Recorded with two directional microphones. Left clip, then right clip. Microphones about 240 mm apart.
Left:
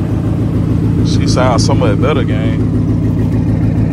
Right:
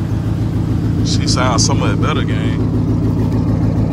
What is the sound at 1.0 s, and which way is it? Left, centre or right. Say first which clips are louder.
Speech: left 3 dB; centre.